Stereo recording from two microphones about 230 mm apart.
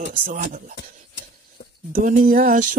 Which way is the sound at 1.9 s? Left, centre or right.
Right.